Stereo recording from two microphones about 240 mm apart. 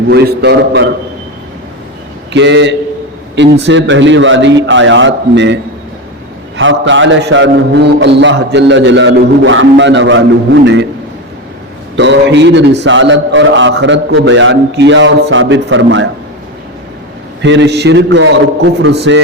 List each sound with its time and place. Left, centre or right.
0.1 s a man's voice: right
2.3 s a man's voice: right
6.6 s a man's voice: right
11.9 s a man's voice: right
17.4 s a man's voice: right